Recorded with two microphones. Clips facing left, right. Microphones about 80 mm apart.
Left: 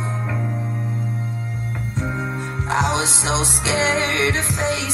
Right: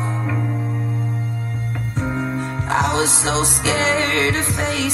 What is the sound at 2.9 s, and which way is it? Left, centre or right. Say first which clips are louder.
Music: right 2 dB; right.